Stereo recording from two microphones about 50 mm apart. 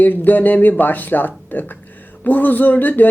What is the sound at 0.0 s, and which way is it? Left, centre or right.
Speech, left.